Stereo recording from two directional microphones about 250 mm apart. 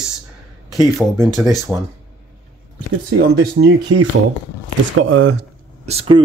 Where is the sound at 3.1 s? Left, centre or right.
Right.